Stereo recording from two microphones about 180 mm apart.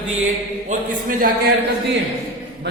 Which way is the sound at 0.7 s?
45° right (ahead or behind).